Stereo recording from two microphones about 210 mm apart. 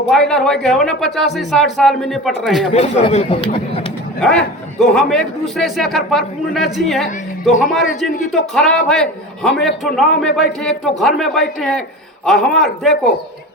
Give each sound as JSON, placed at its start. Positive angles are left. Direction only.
{"t": 0.1, "sound": "a man's voice", "side_deg": 0}
{"t": 2.7, "sound": "speech", "side_deg": 30}
{"t": 4.2, "sound": "a man's voice", "side_deg": 5}